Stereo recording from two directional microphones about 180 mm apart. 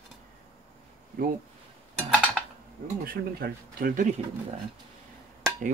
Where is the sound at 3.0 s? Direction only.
55° right (ahead or behind).